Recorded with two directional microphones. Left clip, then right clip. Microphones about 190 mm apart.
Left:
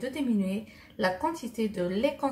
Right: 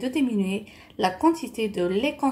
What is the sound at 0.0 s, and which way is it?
A woman's voice, 40° right (ahead or behind).